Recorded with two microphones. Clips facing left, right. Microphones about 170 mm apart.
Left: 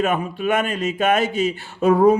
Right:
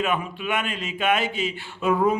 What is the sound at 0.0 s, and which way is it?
A man's voice, 45° left (ahead or behind).